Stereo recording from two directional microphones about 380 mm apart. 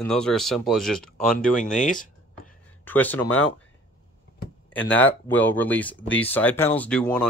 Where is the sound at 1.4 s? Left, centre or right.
Centre.